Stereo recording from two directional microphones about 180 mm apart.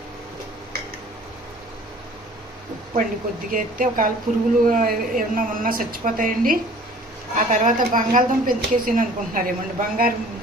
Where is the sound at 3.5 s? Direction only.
50° right (ahead or behind).